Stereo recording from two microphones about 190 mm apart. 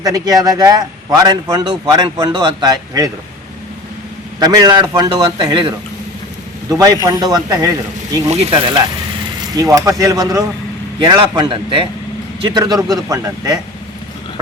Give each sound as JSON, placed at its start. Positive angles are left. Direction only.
{"t": 0.0, "sound": "a man's voice", "side_deg": -20}
{"t": 4.4, "sound": "a man's voice", "side_deg": -20}
{"t": 8.3, "sound": "a man's voice", "side_deg": -30}
{"t": 9.6, "sound": "a man's voice", "side_deg": -15}